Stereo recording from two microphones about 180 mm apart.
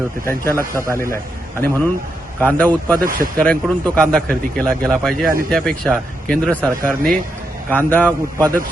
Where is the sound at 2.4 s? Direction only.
10° left (ahead or behind).